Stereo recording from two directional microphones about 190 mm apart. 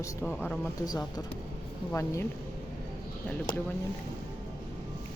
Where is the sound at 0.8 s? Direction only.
20° left (ahead or behind).